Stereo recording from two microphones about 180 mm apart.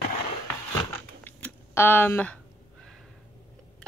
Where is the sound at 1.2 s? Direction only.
10° left (ahead or behind).